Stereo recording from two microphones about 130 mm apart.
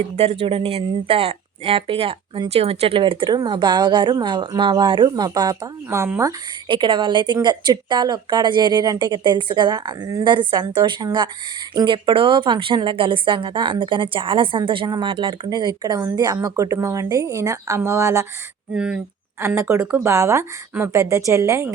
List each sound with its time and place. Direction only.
0.2 s speech: 50° right (ahead or behind); by 6.3 s 20° right (ahead or behind)
6.7 s a woman's voice: 40° right (ahead or behind); by 18.3 s 20° right (ahead or behind)
18.7 s speech: 5° right (ahead or behind)
19.4 s a woman's voice: 20° right (ahead or behind)